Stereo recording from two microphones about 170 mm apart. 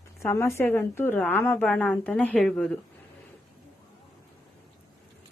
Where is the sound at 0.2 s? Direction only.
15° left (ahead or behind).